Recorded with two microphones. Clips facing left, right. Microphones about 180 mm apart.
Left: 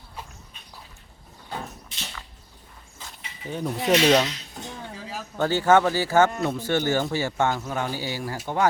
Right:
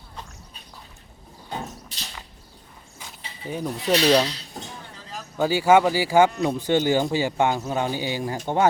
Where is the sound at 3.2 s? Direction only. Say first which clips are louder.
Right 2 dB; 30° right (ahead or behind).